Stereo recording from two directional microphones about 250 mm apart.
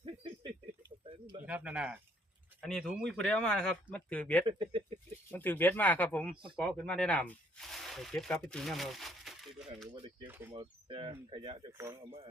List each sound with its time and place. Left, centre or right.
0.0 s a sound: right
1.0 s bird: right
1.5 s speech: centre
4.4 s speech: right
5.3 s speech: centre
10.5 s speech: right